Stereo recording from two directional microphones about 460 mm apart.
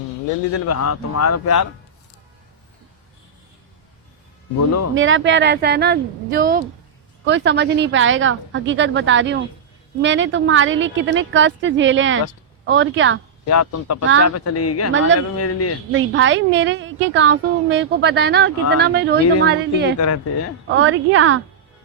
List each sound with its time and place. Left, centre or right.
0.7 s speech: left
4.9 s a woman's voice: right
13.4 s speech: left
14.0 s a woman's voice: right
14.3 s speech: left
14.9 s a woman's voice: right
15.4 s speech: left
15.9 s a woman's voice: right
20.0 s speech: left
20.7 s a woman's voice: right